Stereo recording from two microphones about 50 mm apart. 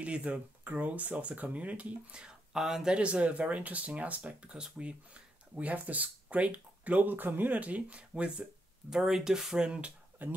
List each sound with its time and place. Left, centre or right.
0.0 s speech: right
8.9 s speech: centre
10.2 s speech: right